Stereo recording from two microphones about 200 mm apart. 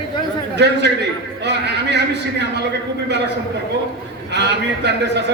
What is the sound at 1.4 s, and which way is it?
A man's voice, 60° right (ahead or behind).